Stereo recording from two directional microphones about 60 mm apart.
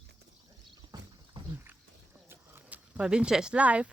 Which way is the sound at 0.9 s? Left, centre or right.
Right.